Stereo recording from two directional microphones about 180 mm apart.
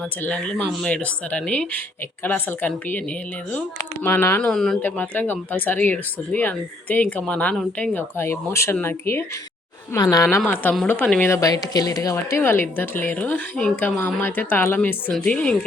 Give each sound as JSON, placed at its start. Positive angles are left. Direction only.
{"t": 0.2, "sound": "speech", "side_deg": 5}
{"t": 4.0, "sound": "a woman's voice", "side_deg": 15}